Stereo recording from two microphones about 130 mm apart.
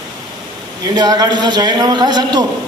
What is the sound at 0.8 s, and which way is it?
A man's voice, 30° right (ahead or behind).